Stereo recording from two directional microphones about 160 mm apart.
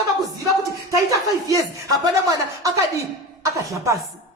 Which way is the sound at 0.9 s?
20° right (ahead or behind).